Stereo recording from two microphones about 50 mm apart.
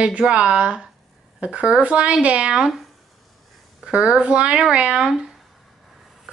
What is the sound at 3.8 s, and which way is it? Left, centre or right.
A woman's voice, centre.